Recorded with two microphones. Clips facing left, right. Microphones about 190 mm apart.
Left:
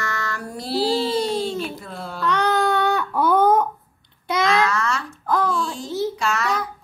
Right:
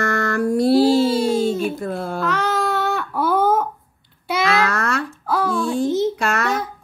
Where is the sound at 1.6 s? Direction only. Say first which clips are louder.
Right 7 dB; 50° right (ahead or behind).